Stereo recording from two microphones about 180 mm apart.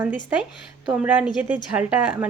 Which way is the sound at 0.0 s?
10° right (ahead or behind).